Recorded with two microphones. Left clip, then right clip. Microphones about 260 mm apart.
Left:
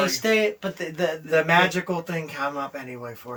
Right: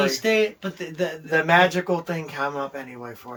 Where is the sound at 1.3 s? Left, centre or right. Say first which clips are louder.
Right 2 dB; centre.